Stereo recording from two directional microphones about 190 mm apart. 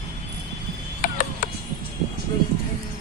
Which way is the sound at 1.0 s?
45° left (ahead or behind).